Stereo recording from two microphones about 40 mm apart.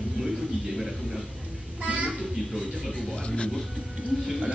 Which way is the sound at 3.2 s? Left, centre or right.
Left.